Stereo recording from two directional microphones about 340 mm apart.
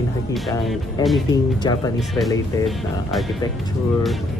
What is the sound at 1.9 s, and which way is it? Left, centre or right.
Music, centre.